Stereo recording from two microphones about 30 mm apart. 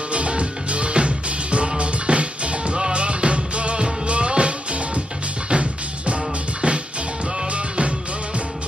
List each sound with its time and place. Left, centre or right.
0.1 s music: right